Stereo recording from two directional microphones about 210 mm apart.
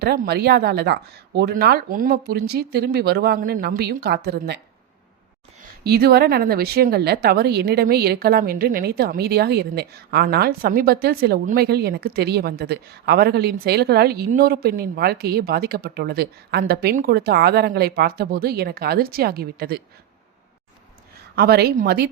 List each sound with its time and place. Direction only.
0.0 s speech: 50° right (ahead or behind)
5.8 s speech: 50° right (ahead or behind)
21.3 s speech: 50° right (ahead or behind)